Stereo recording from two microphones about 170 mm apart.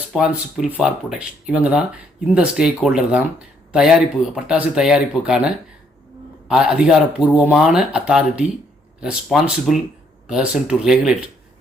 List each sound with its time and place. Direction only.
0.1 s speech: centre (ahead or behind)